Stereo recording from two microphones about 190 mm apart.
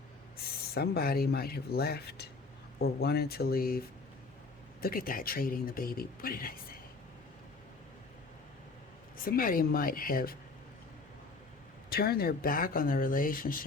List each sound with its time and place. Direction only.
0.7 s speech: 55° left (ahead or behind)
9.2 s speech: 50° left (ahead or behind)
11.9 s speech: 55° left (ahead or behind)